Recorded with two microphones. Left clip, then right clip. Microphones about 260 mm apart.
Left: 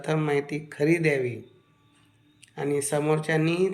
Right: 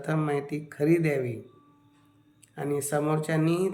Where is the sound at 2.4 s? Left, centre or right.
Centre.